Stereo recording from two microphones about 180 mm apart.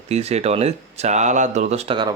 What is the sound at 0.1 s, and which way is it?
Speech, 35° right (ahead or behind).